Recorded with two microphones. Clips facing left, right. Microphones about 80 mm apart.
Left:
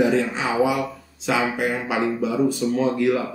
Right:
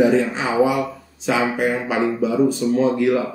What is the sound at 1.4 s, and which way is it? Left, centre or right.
Speech, centre.